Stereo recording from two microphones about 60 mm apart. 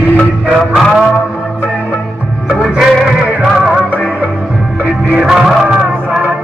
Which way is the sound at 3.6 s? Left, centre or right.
Centre.